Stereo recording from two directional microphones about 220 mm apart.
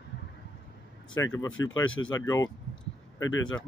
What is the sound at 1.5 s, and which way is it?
Speech, 65° left (ahead or behind).